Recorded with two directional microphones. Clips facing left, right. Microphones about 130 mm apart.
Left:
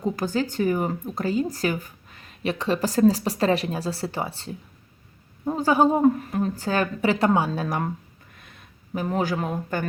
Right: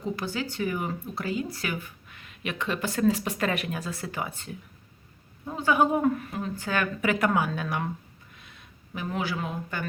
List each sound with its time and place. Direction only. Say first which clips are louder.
0.0 s speech: left 6 dB; 45° left (ahead or behind)
8.4 s a sound: left 3 dB; 50° left (ahead or behind)
8.9 s speech: left 6 dB; 40° left (ahead or behind)